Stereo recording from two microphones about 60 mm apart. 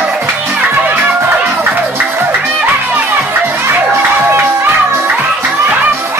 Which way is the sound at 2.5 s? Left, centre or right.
Right.